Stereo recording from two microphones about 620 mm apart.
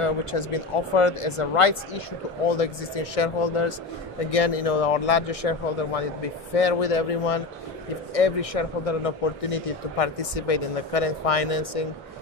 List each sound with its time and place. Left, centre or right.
0.0 s speech: left
4.3 s speech: left